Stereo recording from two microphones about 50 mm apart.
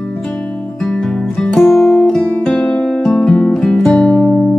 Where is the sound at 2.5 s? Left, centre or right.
Centre.